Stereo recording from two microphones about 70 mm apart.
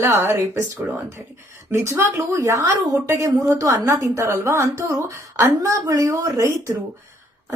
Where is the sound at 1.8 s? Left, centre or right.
Right.